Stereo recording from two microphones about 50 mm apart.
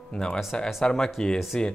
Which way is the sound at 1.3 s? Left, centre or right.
Centre.